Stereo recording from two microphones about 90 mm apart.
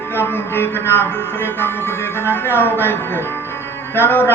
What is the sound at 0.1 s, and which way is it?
Speech, 25° left (ahead or behind).